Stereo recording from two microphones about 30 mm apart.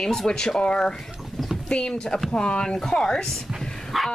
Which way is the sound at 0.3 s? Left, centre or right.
Left.